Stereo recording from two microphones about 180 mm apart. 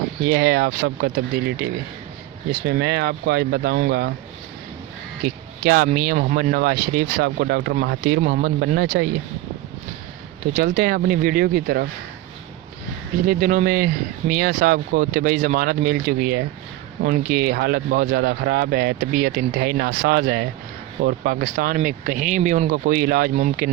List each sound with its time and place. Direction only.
0.3 s speech: 60° right (ahead or behind)
5.2 s speech: 55° right (ahead or behind)
10.5 s speech: 55° right (ahead or behind)
13.2 s speech: 50° right (ahead or behind)